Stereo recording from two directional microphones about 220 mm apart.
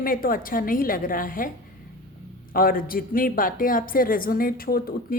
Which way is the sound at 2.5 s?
40° left (ahead or behind).